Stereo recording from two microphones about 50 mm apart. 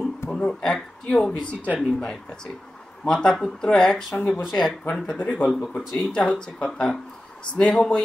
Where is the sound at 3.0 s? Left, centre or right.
Centre.